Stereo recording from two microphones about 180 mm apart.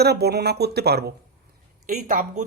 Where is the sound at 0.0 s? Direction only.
65° right (ahead or behind).